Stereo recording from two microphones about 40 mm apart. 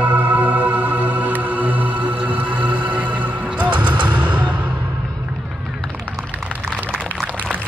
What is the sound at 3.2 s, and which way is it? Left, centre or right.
Music, right.